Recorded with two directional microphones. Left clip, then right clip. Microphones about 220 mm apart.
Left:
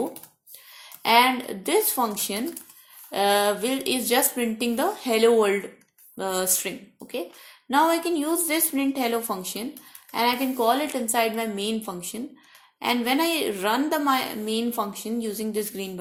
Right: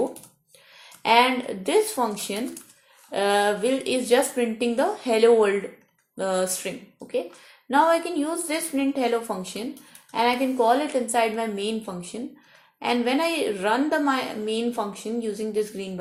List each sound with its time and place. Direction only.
0.8 s a woman's voice: 30° left (ahead or behind)
2.4 s speech: centre (ahead or behind)
3.1 s a woman's voice: 30° left (ahead or behind)